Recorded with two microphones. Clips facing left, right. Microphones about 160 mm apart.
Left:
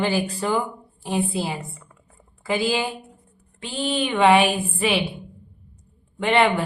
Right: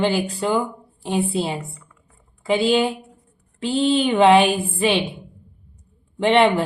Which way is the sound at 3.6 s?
30° right (ahead or behind).